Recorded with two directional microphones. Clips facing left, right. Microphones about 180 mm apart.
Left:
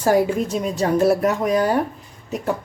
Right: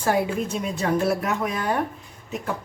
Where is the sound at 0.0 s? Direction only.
40° left (ahead or behind).